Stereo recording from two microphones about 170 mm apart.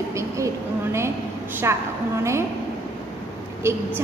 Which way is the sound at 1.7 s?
15° right (ahead or behind).